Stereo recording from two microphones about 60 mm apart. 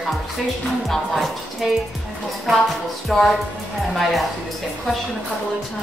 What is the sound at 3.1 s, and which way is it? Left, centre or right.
A woman's voice, centre.